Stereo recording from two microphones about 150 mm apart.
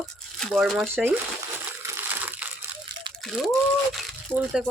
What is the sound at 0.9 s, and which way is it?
Speech, 15° right (ahead or behind).